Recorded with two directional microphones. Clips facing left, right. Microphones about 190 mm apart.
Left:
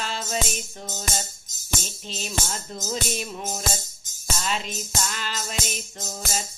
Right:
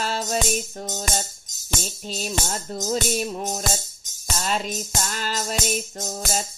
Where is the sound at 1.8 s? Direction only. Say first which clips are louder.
Right 4 dB; 40° right (ahead or behind).